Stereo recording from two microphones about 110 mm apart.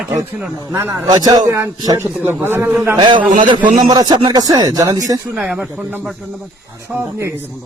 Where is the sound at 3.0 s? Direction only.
45° right (ahead or behind).